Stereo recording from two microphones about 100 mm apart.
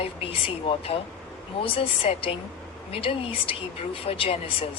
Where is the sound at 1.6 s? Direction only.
65° left (ahead or behind).